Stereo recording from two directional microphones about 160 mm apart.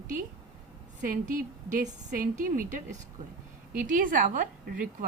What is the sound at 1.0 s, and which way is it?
A woman's voice, 55° right (ahead or behind).